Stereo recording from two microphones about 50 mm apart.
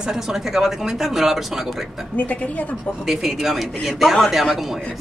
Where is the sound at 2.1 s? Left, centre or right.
Left.